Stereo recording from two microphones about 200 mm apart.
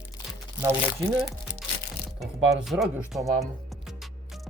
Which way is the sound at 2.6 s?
Centre (ahead or behind).